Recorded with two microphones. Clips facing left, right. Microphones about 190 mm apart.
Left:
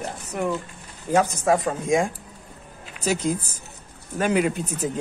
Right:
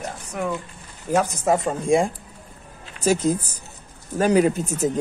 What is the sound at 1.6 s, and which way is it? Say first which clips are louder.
Speech: right 2 dB; 30° right (ahead or behind).